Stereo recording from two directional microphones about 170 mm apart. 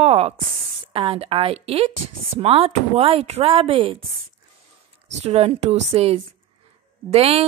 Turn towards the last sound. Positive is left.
turn(degrees=-35)  # may be behind; listen again after turning